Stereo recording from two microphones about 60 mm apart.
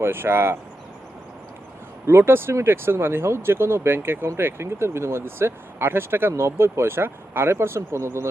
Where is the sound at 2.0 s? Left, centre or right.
Right.